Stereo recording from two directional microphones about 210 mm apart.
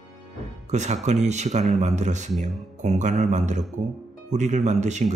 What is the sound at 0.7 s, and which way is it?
Speech, 35° right (ahead or behind).